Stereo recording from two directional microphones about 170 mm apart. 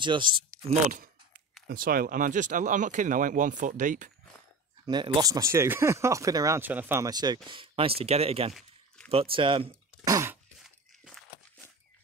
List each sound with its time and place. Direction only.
0.0 s speech: 30° right (ahead or behind)
1.7 s speech: 60° right (ahead or behind)
4.8 s speech: 25° right (ahead or behind)
8.5 s a sound: 5° left (ahead or behind)
9.1 s speech: 35° right (ahead or behind)
9.7 s a sound: 15° right (ahead or behind)